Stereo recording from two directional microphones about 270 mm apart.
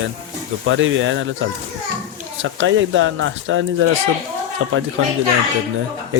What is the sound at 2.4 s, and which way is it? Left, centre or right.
Speech, right.